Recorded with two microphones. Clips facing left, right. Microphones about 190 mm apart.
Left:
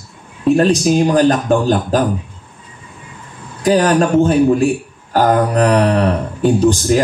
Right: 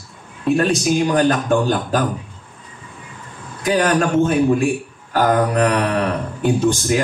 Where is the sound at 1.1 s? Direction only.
35° left (ahead or behind).